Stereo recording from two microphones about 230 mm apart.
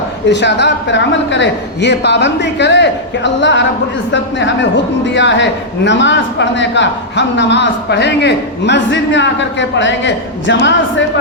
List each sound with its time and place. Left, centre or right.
0.3 s a man's voice: left